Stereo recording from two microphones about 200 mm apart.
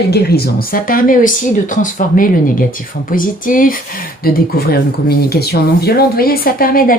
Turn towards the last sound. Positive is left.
turn(degrees=45)  # may be behind; listen again after turning